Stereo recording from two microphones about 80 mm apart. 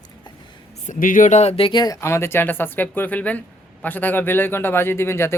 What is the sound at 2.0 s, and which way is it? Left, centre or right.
A man's voice, left.